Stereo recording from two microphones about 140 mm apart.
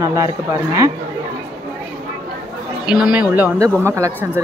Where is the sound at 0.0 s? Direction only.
25° right (ahead or behind).